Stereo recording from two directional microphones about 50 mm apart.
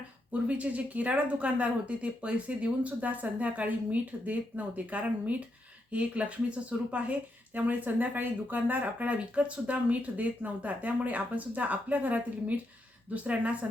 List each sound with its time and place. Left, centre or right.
0.4 s speech: right